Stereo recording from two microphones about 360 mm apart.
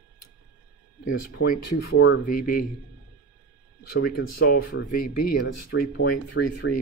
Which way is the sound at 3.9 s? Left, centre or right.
Left.